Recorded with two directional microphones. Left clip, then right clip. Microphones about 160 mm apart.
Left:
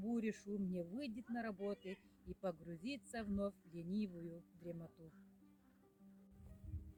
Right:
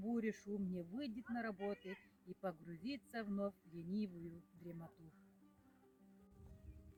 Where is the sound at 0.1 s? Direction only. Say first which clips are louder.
Right 1 dB; 45° left (ahead or behind).